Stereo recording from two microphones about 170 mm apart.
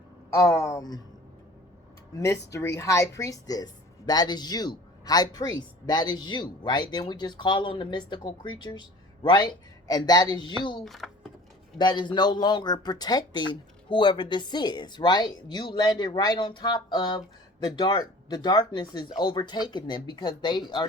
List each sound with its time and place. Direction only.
0.3 s speech: 20° left (ahead or behind)
2.1 s speech: 15° left (ahead or behind)
10.8 s typing: centre (ahead or behind)
11.8 s speech: 25° left (ahead or behind)